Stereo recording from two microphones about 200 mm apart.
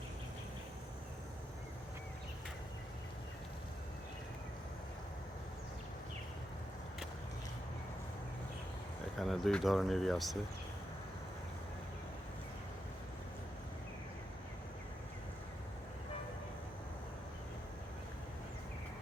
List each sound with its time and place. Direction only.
9.1 s speech: centre (ahead or behind)